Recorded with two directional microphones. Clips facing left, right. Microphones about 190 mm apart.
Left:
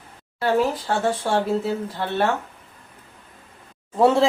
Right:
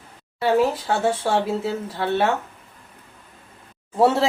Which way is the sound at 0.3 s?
Centre (ahead or behind).